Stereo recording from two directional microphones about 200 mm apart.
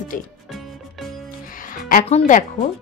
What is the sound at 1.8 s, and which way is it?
Music, 45° left (ahead or behind).